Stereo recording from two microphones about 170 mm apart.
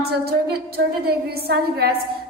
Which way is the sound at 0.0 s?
70° right (ahead or behind).